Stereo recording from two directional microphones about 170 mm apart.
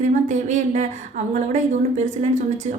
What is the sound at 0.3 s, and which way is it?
Speech, 45° right (ahead or behind).